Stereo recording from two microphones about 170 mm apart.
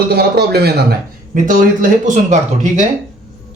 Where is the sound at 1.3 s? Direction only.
50° right (ahead or behind).